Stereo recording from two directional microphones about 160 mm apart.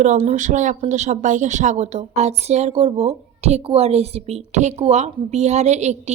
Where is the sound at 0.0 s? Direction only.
50° right (ahead or behind).